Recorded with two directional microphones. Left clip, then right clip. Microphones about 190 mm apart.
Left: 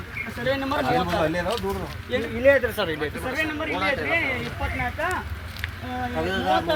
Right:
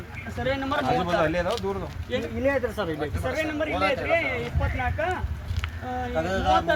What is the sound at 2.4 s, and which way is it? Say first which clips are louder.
Speech: left 7 dB; 60° right (ahead or behind).